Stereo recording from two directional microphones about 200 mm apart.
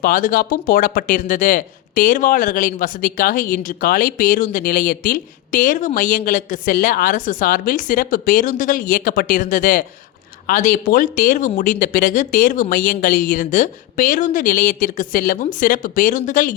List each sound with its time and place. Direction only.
0.0 s speech: 45° left (ahead or behind)